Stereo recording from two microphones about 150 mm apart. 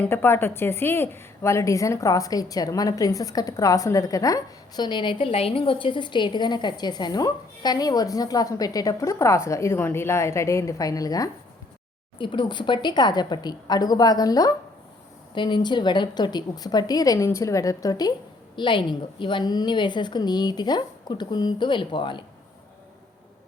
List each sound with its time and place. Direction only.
0.0 s a woman's voice: 15° left (ahead or behind); by 22.2 s 30° left (ahead or behind)